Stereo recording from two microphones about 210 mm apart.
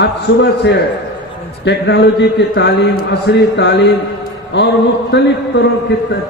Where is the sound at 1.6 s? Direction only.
55° left (ahead or behind).